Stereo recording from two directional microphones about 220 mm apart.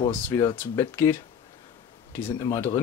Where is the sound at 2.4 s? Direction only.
15° left (ahead or behind).